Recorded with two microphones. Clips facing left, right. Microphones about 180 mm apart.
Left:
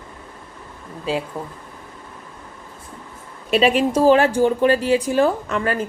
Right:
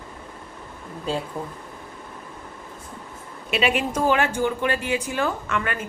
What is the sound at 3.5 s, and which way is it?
Speech, 35° left (ahead or behind).